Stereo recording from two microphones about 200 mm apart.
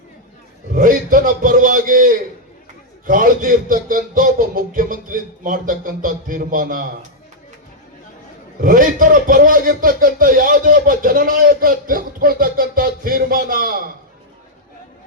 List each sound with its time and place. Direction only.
0.8 s a man's voice: 45° right (ahead or behind)
8.6 s a man's voice: 45° right (ahead or behind)